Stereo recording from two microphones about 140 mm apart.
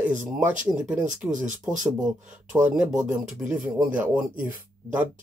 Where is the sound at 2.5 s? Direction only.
10° right (ahead or behind).